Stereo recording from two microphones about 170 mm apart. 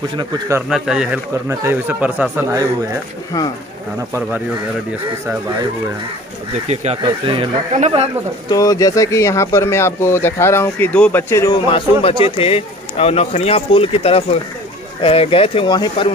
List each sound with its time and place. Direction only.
0.2 s speech: 15° right (ahead or behind)
0.7 s speech: 5° right (ahead or behind)
1.5 s speech: 15° right (ahead or behind)
6.7 s speech: 40° right (ahead or behind)
8.5 s speech: 20° left (ahead or behind)